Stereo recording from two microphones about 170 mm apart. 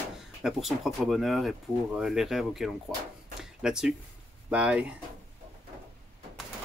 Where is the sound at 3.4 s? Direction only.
5° right (ahead or behind).